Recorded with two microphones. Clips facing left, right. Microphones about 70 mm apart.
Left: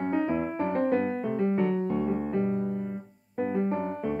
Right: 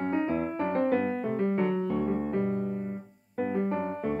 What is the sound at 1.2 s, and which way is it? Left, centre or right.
Keyboard, right.